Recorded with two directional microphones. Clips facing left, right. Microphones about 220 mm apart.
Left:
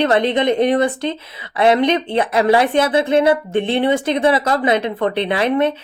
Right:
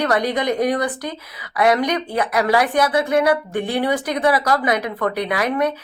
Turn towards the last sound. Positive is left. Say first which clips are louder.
# left 4 dB
turn(degrees=25)  # may be behind; listen again after turning